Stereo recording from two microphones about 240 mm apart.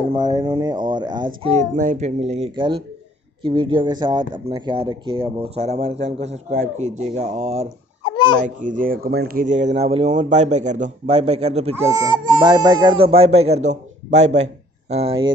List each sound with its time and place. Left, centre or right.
0.1 s speech: centre
11.9 s speech: centre